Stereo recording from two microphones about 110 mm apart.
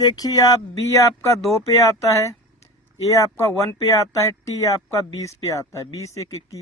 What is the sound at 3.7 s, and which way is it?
Speech, 30° left (ahead or behind).